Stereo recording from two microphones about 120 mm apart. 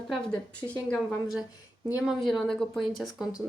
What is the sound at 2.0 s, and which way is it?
Speech, centre (ahead or behind).